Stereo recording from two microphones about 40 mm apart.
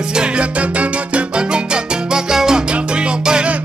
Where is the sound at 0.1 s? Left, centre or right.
Right.